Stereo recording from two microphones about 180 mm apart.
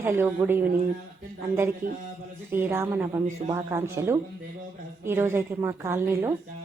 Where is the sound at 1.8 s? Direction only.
50° right (ahead or behind).